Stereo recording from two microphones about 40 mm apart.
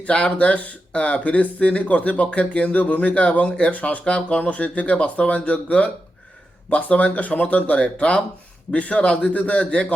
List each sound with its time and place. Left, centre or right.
0.0 s speech: left